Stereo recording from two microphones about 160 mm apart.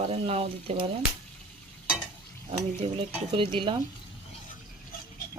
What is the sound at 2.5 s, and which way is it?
Speech, 35° right (ahead or behind).